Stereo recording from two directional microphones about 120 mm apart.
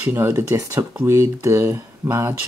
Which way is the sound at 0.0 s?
25° right (ahead or behind).